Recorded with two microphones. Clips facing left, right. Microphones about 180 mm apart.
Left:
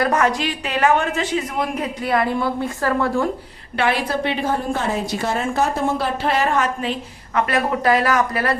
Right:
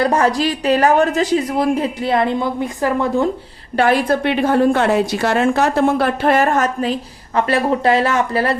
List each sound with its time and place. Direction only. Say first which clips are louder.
0.0 s a woman's voice: right 3 dB; 30° right (ahead or behind)
3.8 s a woman's voice: right 6 dB; 45° right (ahead or behind)
4.2 s a woman's voice: right 7 dB; 60° right (ahead or behind); by 8.5 s 30° right (ahead or behind)